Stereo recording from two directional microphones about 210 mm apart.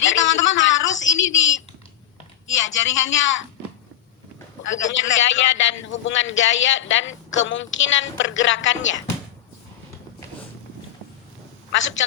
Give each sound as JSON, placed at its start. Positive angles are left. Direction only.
{"t": 0.0, "sound": "a sound", "side_deg": 65}
{"t": 2.5, "sound": "speech", "side_deg": 60}
{"t": 4.6, "sound": "a man's voice", "side_deg": 65}
{"t": 11.7, "sound": "a man's voice", "side_deg": 65}